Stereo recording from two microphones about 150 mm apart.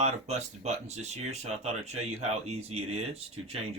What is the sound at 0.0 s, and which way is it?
Speech, 45° right (ahead or behind).